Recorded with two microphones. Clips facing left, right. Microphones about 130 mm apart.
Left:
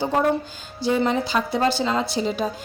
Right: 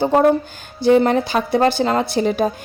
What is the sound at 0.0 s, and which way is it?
A woman's voice, 50° right (ahead or behind).